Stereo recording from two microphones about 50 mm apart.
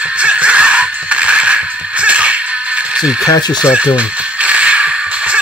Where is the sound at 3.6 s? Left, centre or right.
Right.